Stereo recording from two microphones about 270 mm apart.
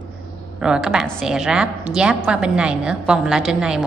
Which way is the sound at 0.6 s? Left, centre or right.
Centre.